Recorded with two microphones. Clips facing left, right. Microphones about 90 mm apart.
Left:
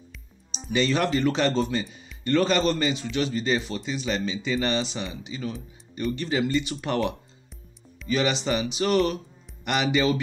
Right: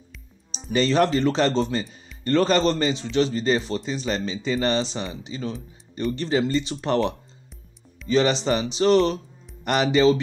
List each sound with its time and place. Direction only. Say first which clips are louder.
0.7 s a man's voice: right 4 dB; 35° right (ahead or behind)